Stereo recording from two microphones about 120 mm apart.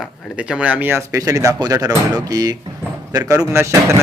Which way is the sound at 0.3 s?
10° right (ahead or behind).